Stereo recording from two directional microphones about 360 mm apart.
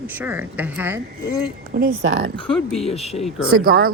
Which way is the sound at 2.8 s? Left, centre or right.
Centre.